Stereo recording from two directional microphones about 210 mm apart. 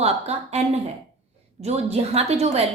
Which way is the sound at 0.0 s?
30° right (ahead or behind).